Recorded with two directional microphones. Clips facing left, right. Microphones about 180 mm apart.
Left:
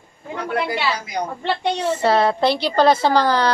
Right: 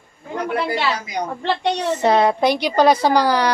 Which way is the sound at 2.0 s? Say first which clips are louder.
Right 2 dB; 20° right (ahead or behind).